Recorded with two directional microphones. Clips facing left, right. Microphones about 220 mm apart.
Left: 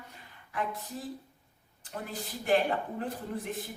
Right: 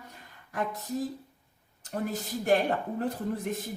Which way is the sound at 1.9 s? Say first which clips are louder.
Right 7 dB; 45° right (ahead or behind).